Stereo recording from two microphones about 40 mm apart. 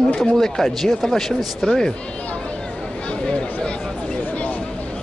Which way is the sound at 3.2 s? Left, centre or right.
Left.